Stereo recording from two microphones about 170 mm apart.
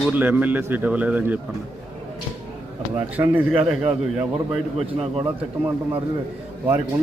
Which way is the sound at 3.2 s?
5° right (ahead or behind).